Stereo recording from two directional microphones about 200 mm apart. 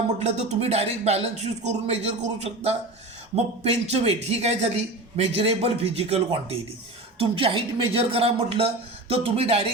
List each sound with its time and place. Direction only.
0.2 s a man's voice: 35° right (ahead or behind)